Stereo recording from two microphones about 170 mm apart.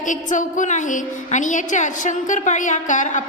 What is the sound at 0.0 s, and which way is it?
A woman's voice, 50° left (ahead or behind).